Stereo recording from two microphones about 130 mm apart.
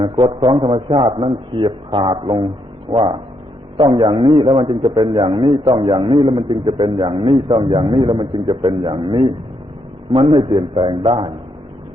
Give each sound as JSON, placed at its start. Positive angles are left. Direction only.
{"t": 0.0, "sound": "a man's voice", "side_deg": -40}